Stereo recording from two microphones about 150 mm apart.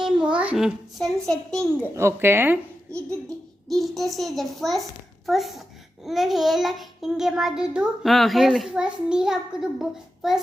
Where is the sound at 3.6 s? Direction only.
Centre (ahead or behind).